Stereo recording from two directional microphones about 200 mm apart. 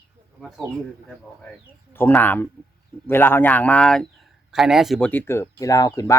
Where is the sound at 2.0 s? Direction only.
10° left (ahead or behind).